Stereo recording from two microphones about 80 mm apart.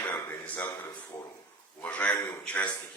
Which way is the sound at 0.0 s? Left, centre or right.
Left.